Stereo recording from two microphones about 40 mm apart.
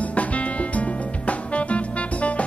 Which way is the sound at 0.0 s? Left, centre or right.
Left.